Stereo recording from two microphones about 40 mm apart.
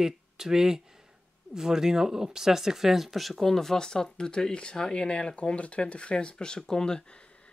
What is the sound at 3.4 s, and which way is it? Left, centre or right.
Speech, centre.